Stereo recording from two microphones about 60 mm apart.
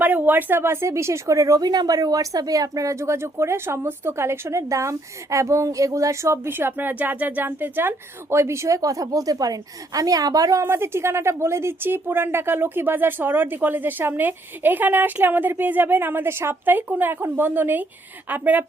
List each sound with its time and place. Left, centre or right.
0.0 s speech: right
0.6 s a woman's voice: right
6.5 s speech: right
8.8 s a woman's voice: right
10.7 s speech: right